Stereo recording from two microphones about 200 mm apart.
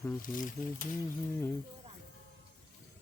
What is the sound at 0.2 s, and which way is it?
Speech, 40° left (ahead or behind).